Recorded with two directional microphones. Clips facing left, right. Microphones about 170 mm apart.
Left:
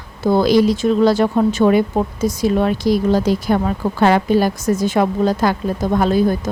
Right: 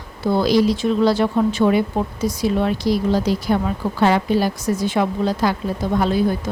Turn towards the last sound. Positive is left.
turn(degrees=45)  # may be behind; listen again after turning